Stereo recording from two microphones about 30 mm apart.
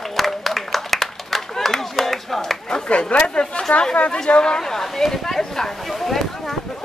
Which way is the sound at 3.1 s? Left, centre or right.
Left.